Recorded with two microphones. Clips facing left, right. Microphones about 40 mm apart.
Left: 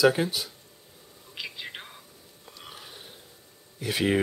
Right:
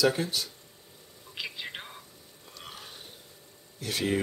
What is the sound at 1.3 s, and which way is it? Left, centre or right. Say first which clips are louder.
Whispering: even; centre.